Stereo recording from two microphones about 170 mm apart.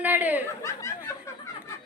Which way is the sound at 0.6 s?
20° left (ahead or behind).